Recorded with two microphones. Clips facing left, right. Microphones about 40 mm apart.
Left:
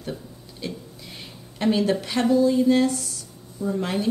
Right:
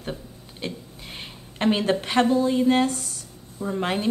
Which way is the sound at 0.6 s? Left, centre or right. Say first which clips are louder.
Even; right.